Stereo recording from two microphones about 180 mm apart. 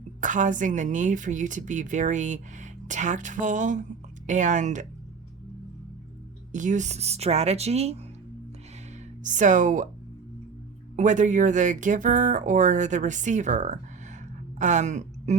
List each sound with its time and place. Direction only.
0.2 s speech: 45° right (ahead or behind)
6.5 s speech: 45° right (ahead or behind)
9.2 s speech: 45° right (ahead or behind)
10.9 s a woman's voice: 45° right (ahead or behind)